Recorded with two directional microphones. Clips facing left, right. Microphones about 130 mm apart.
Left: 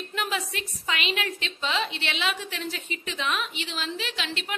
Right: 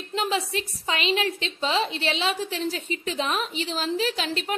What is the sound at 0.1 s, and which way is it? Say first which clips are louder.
A woman's voice: right 6 dB; 30° right (ahead or behind).